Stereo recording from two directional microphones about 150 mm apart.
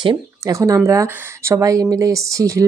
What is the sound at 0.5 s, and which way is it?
A woman's voice, 20° right (ahead or behind).